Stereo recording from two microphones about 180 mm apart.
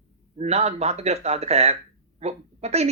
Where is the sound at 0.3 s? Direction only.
35° right (ahead or behind).